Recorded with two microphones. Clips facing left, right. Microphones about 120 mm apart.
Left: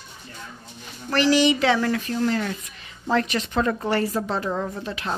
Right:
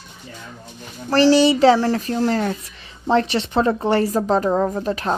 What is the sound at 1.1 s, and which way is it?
A woman's voice, 35° right (ahead or behind).